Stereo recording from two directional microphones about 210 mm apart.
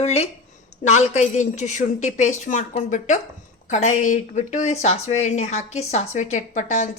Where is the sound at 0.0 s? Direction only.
30° left (ahead or behind).